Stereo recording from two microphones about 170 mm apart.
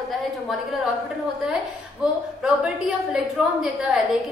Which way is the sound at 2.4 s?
5° right (ahead or behind).